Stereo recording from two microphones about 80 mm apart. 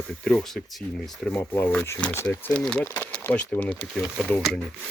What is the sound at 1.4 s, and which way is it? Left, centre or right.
Speech, left.